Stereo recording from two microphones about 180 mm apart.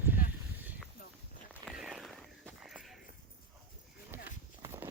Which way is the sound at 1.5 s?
5° right (ahead or behind).